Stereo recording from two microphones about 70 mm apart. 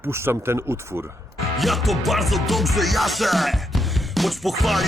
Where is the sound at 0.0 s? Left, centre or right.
Right.